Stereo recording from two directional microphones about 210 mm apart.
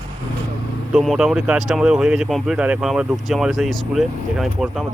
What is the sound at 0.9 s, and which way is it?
Speech, centre (ahead or behind).